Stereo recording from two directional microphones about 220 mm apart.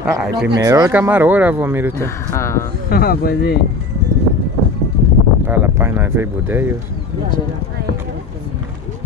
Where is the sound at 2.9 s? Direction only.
45° left (ahead or behind).